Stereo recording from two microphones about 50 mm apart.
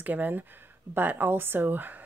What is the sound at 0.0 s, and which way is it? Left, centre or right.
Speech, right.